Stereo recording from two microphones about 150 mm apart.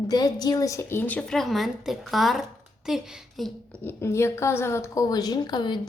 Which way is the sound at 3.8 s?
15° left (ahead or behind).